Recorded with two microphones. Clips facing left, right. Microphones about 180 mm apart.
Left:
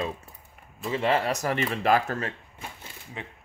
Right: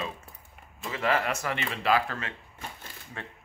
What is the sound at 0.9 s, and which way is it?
Speech, 30° left (ahead or behind).